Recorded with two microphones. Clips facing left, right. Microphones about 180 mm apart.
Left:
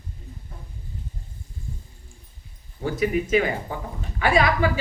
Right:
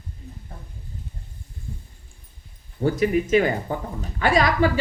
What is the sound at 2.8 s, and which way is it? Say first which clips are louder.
Speech: right 3 dB; 40° right (ahead or behind).